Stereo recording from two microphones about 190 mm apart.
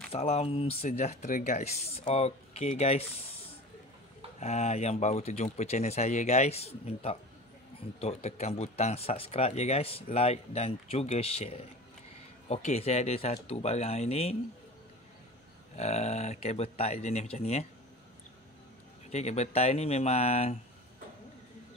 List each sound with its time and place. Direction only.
0.1 s speech: 30° left (ahead or behind)
4.4 s speech: 35° left (ahead or behind)
15.7 s speech: 35° left (ahead or behind)
19.0 s speech: 35° left (ahead or behind)